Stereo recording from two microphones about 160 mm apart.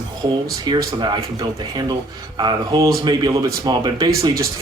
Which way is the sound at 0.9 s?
25° right (ahead or behind).